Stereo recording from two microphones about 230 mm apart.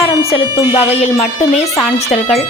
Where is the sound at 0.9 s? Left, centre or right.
Left.